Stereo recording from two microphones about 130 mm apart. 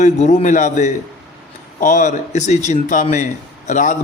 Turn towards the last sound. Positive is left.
turn(degrees=75)  # may be behind; listen again after turning